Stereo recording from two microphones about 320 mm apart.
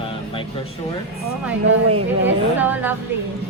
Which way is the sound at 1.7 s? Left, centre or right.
Right.